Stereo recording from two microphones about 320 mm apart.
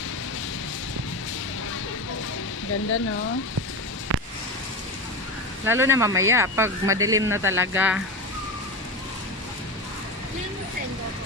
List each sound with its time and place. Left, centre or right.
2.7 s speech: left
4.1 s a sound: right
5.7 s speech: centre